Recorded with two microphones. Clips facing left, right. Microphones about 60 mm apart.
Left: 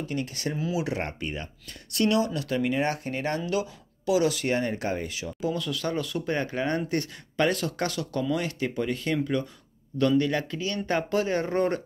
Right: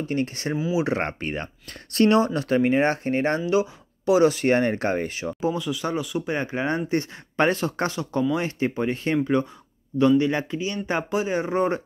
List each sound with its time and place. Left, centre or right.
0.0 s speech: right
4.6 s speech: right
5.5 s speech: centre; by 9.5 s right
9.9 s speech: centre